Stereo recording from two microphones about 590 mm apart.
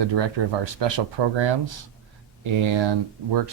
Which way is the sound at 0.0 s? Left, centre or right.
Right.